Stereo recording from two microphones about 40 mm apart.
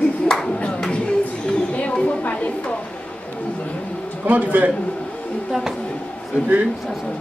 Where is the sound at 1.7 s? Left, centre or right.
Left.